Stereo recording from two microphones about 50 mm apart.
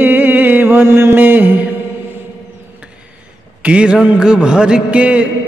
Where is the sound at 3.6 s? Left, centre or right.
Right.